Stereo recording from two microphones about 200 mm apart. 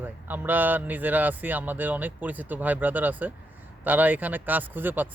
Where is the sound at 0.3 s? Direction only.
10° right (ahead or behind).